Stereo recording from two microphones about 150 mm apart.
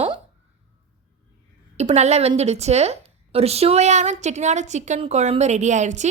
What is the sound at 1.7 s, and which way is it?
A woman's voice, 45° right (ahead or behind).